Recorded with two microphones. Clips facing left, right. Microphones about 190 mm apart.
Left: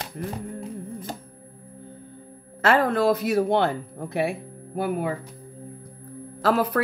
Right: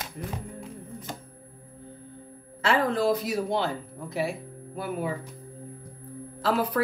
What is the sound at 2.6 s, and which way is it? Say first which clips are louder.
A woman's voice: left 4 dB; 60° left (ahead or behind).